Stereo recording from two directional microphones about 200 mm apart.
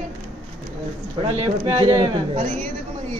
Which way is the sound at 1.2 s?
25° right (ahead or behind).